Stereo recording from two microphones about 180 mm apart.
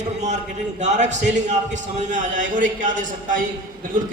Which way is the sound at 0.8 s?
40° right (ahead or behind).